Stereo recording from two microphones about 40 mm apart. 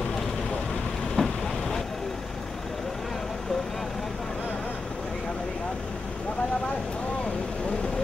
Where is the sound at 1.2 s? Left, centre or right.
Left.